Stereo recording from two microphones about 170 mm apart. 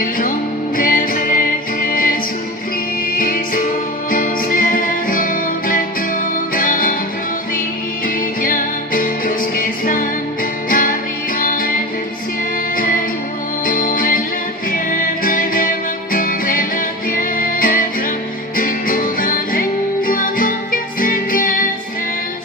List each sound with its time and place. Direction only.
0.0 s music: 55° left (ahead or behind)
3.2 s music: 55° left (ahead or behind)
8.4 s music: 55° left (ahead or behind)
12.7 s music: 55° left (ahead or behind)